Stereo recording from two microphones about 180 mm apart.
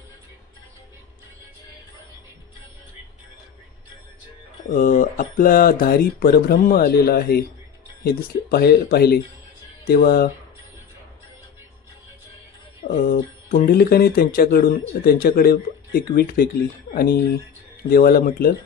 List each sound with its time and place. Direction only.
4.6 s speech: 50° left (ahead or behind)
12.8 s speech: 55° left (ahead or behind)